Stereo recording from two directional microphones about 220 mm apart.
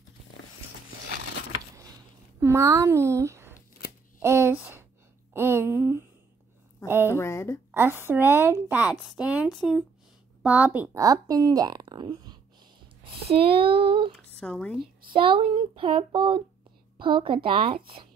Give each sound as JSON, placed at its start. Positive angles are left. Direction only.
{"t": 2.4, "sound": "speech", "side_deg": -15}
{"t": 4.2, "sound": "a sound", "side_deg": -10}
{"t": 6.9, "sound": "a woman's voice", "side_deg": -10}
{"t": 7.2, "sound": "a woman's voice", "side_deg": 10}
{"t": 7.7, "sound": "a woman's voice", "side_deg": -10}
{"t": 14.1, "sound": "speech", "side_deg": 5}
{"t": 15.1, "sound": "speech", "side_deg": -25}